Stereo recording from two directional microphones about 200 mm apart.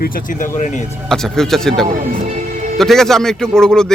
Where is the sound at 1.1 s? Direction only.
Centre (ahead or behind).